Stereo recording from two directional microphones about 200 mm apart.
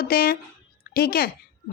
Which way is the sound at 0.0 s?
50° left (ahead or behind).